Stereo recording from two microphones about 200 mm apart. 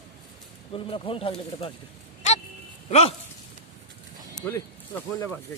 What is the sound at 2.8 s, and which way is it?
Speech, 30° left (ahead or behind).